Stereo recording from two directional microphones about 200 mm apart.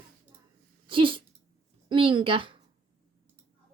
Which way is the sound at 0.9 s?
25° right (ahead or behind).